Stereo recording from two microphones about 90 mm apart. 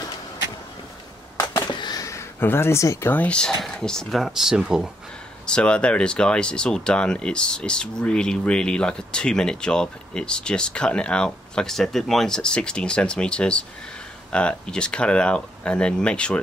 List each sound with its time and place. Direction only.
1.7 s a sound: 55° left (ahead or behind)
2.0 s speech: 30° left (ahead or behind)
3.1 s speech: 15° left (ahead or behind); by 4.9 s 10° right (ahead or behind)
5.5 s speech: 10° left (ahead or behind)